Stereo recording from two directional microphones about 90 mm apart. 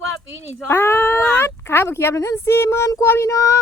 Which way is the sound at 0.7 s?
25° left (ahead or behind).